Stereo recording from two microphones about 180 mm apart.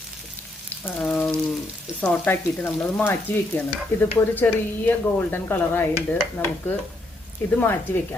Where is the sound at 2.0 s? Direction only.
10° left (ahead or behind).